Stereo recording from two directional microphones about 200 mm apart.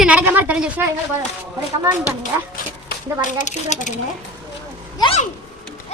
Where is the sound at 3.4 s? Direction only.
40° left (ahead or behind).